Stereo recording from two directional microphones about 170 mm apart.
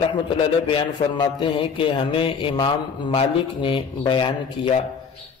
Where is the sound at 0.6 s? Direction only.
30° left (ahead or behind).